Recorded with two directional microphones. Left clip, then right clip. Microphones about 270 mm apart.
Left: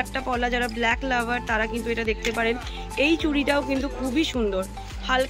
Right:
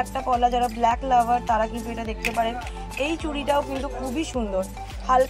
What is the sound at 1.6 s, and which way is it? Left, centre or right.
Speech, centre.